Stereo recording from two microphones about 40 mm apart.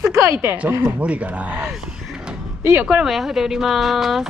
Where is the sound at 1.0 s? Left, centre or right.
Right.